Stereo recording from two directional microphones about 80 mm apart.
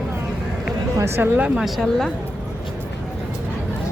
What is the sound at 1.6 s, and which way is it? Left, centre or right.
Speech, centre.